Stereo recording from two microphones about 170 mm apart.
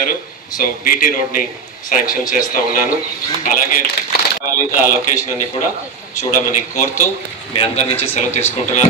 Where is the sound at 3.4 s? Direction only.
55° left (ahead or behind).